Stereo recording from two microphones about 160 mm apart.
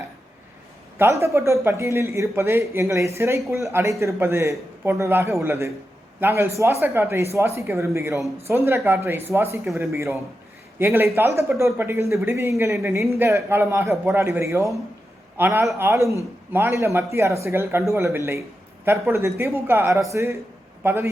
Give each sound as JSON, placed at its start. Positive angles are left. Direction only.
{"t": 0.9, "sound": "speech", "side_deg": -15}